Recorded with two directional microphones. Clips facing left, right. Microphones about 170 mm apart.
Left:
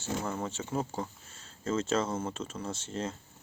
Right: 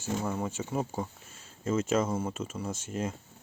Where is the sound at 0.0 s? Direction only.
10° right (ahead or behind).